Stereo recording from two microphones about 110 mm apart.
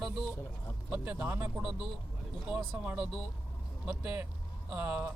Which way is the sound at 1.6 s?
5° right (ahead or behind).